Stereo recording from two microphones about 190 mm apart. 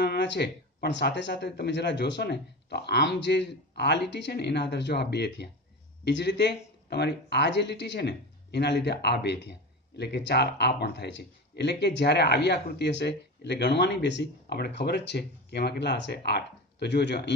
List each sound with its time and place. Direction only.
0.0 s speech: 65° left (ahead or behind)